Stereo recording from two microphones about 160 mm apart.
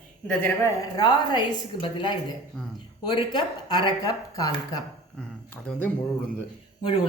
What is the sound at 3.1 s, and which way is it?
A woman's voice, 25° left (ahead or behind).